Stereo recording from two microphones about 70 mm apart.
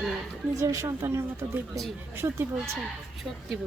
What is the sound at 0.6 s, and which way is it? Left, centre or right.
A woman's voice, right.